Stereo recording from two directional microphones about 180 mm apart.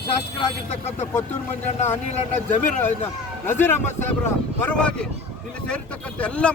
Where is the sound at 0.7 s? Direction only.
40° left (ahead or behind).